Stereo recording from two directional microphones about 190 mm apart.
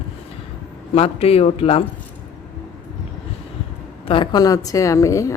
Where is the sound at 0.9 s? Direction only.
30° left (ahead or behind).